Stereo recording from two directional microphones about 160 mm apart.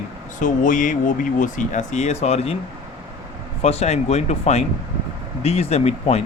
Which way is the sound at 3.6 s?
40° left (ahead or behind).